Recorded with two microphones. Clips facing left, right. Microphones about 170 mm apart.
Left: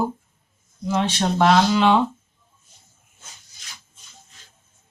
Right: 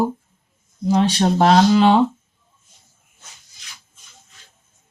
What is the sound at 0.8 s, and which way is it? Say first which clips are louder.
Speech: right 5 dB; 35° right (ahead or behind).